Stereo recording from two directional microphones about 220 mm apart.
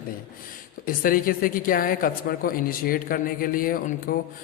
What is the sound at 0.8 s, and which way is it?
A woman's voice, 40° left (ahead or behind).